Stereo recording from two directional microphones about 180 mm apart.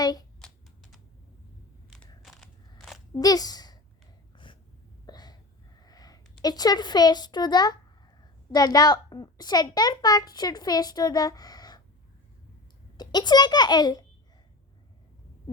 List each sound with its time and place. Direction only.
0.0 s typing: 20° left (ahead or behind)
0.4 s typing: centre (ahead or behind)
1.9 s crunch: centre (ahead or behind)
3.2 s speech: 20° left (ahead or behind)
5.0 s a sound: 20° left (ahead or behind)
6.4 s a child's voice: 20° left (ahead or behind)
13.0 s a child's voice: 25° left (ahead or behind)